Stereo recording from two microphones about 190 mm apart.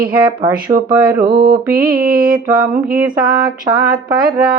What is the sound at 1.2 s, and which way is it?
Mantra, 45° right (ahead or behind).